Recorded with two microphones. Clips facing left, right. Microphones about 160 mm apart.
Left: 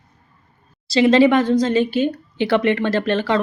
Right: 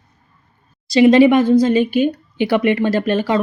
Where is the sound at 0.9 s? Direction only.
15° right (ahead or behind).